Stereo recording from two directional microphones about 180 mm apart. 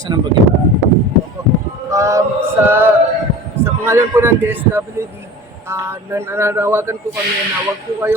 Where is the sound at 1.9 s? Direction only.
15° right (ahead or behind).